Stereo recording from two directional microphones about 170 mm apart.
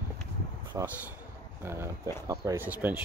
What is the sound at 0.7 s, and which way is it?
Speech, 15° right (ahead or behind).